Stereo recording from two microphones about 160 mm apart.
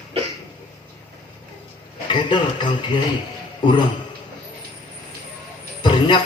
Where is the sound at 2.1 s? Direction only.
30° left (ahead or behind).